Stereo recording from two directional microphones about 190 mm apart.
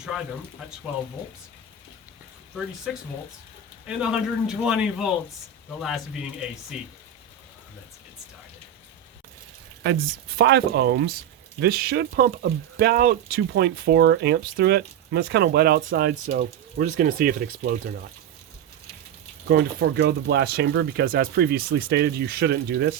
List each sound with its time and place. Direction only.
3.8 s a man's voice: 5° right (ahead or behind)
9.8 s speech: 65° right (ahead or behind)
19.5 s speech: 60° right (ahead or behind)